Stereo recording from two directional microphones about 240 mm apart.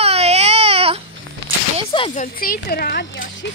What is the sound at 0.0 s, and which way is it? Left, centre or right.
Baby cry, right.